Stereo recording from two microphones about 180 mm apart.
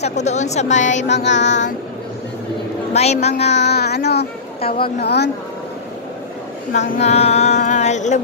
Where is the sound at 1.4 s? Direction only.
40° left (ahead or behind).